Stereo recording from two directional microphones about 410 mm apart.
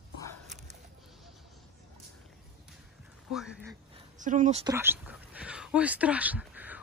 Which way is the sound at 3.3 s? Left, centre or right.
Centre.